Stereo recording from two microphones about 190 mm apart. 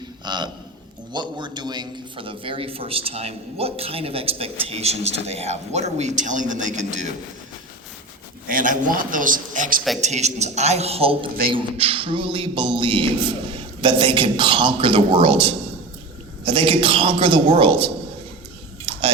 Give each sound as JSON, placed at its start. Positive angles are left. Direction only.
{"t": 0.3, "sound": "a man's voice", "side_deg": -25}
{"t": 8.4, "sound": "a man's voice", "side_deg": -45}
{"t": 18.9, "sound": "chewing", "side_deg": -30}